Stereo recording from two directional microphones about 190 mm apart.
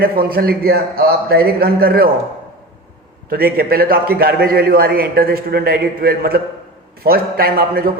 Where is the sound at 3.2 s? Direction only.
55° right (ahead or behind).